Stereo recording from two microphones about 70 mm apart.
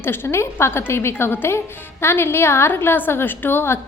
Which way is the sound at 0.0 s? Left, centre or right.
Left.